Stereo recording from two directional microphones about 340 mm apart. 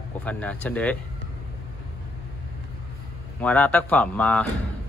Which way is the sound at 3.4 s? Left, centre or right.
Centre.